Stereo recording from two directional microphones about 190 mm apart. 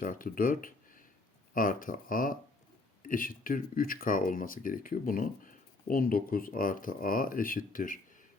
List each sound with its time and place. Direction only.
0.0 s speech: 45° left (ahead or behind)